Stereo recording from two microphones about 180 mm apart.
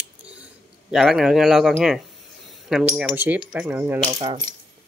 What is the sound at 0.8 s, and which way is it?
Speech, 5° right (ahead or behind).